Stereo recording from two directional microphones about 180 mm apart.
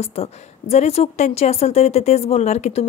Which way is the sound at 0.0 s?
35° left (ahead or behind).